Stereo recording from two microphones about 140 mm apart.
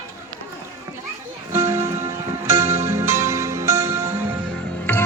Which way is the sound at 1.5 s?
20° right (ahead or behind).